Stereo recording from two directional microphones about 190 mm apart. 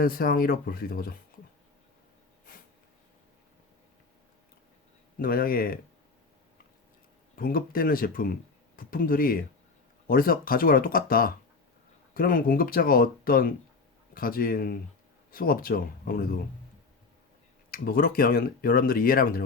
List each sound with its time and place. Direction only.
0.0 s speech: 50° left (ahead or behind)
5.2 s speech: 50° left (ahead or behind)
7.3 s speech: 50° left (ahead or behind)
17.7 s speech: 50° left (ahead or behind)